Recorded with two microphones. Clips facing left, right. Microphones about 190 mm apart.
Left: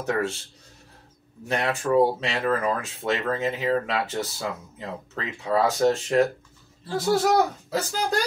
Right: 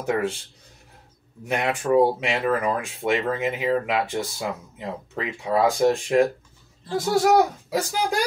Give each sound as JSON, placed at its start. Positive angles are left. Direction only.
{"t": 0.1, "sound": "speech", "side_deg": -20}
{"t": 1.5, "sound": "speech", "side_deg": -15}